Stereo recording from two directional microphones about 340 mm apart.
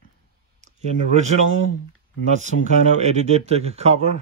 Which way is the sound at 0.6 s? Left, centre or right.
Centre.